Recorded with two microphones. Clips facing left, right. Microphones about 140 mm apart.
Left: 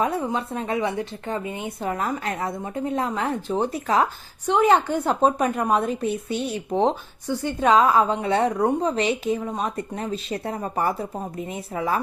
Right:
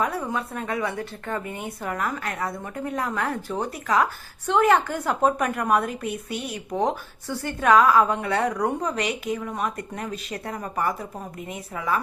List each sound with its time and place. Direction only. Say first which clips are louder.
0.0 s a woman's voice: left 3 dB; 25° left (ahead or behind)
4.4 s a woman's voice: left 1 dB; 15° left (ahead or behind)